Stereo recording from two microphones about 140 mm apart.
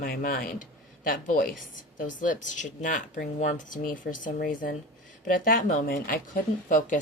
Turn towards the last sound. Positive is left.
turn(degrees=85)